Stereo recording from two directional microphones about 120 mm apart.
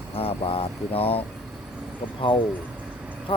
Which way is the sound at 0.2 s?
50° left (ahead or behind).